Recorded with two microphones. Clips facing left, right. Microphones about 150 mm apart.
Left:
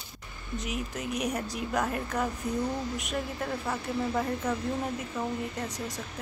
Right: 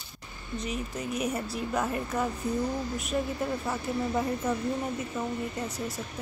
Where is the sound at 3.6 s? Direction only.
5° right (ahead or behind).